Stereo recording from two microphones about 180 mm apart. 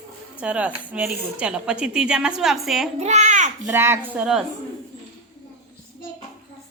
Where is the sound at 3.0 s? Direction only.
40° right (ahead or behind).